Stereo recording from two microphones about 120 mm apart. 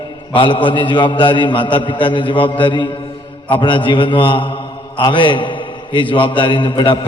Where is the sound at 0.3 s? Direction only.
45° left (ahead or behind).